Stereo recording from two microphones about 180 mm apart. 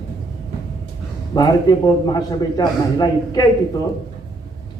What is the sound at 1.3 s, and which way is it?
A man's voice, 20° left (ahead or behind).